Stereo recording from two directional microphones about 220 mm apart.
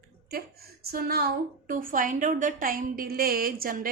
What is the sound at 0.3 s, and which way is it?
A woman's voice, 45° right (ahead or behind).